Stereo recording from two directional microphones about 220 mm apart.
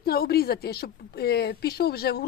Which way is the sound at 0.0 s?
45° left (ahead or behind).